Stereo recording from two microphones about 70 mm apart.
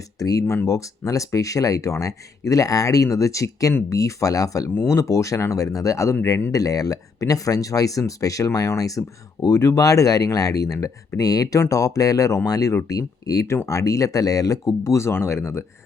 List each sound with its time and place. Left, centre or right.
0.2 s speech: left
0.4 s speech: left
4.7 s speech: left
14.8 s speech: left